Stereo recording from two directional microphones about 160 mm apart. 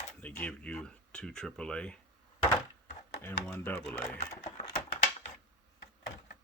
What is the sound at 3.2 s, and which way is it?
Speech, 15° left (ahead or behind).